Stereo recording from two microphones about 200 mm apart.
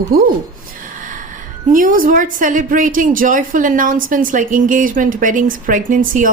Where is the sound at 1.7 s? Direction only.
45° right (ahead or behind).